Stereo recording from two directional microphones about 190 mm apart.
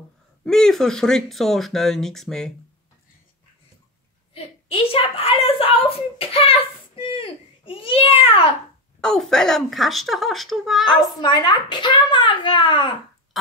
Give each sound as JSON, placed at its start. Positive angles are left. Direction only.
{"t": 0.5, "sound": "speech", "side_deg": 0}
{"t": 4.3, "sound": "a woman's voice", "side_deg": 30}
{"t": 9.0, "sound": "speech", "side_deg": 5}
{"t": 11.1, "sound": "a child's voice", "side_deg": 20}